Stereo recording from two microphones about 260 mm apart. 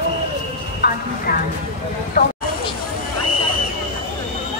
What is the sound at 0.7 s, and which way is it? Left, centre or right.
Speech, left.